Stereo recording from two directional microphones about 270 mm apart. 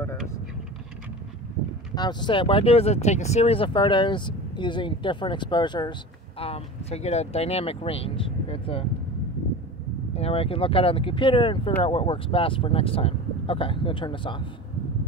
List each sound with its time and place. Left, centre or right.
2.0 s speech: centre
10.1 s speech: left